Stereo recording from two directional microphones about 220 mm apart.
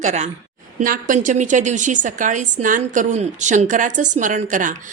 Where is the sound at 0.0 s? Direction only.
30° right (ahead or behind).